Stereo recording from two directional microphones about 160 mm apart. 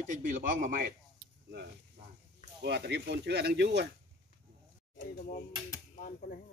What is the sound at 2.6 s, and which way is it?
Speech, 90° right.